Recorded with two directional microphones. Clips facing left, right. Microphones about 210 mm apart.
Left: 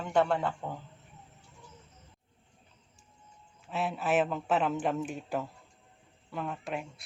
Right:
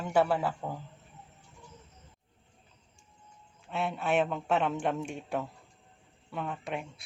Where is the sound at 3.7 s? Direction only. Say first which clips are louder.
Even; centre (ahead or behind).